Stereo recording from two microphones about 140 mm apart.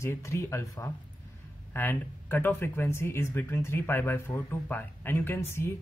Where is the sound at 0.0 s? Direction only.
20° left (ahead or behind).